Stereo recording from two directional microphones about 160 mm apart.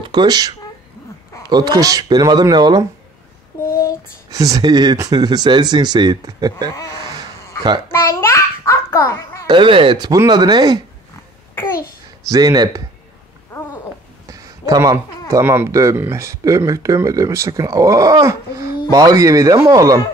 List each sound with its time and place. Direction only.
0.0 s speech: 30° right (ahead or behind)
3.5 s child singing: 20° left (ahead or behind)
4.3 s speech: 20° right (ahead or behind)
7.9 s babbling: 20° left (ahead or behind)
9.5 s speech: 30° right (ahead or behind)
12.3 s speech: 25° right (ahead or behind)
14.2 s speech: 20° right (ahead or behind)